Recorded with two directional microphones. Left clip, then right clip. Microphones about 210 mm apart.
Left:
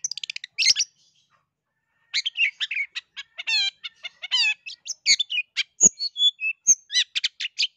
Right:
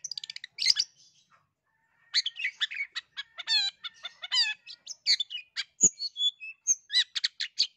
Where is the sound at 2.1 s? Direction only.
15° left (ahead or behind).